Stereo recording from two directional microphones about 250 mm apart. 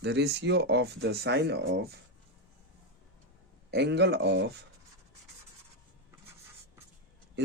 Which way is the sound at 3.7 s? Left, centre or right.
Right.